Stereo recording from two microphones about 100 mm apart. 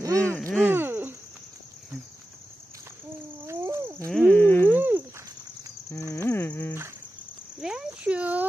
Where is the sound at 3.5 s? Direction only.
30° right (ahead or behind).